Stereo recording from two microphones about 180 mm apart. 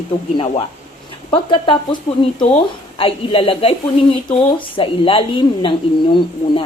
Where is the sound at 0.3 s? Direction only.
35° left (ahead or behind).